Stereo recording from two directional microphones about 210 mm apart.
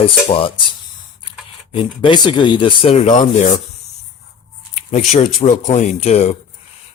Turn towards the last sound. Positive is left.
turn(degrees=30)  # may be behind; listen again after turning